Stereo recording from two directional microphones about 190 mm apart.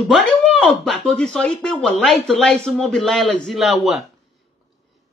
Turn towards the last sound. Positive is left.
turn(degrees=0)  # may be behind; listen again after turning